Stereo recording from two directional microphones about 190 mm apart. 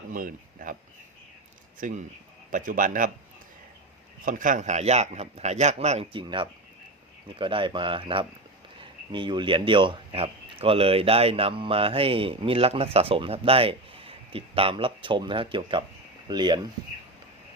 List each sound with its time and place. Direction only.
0.1 s speech: 45° right (ahead or behind)
1.8 s a man's voice: 40° right (ahead or behind)
4.3 s a man's voice: 45° right (ahead or behind); by 16.6 s 25° right (ahead or behind)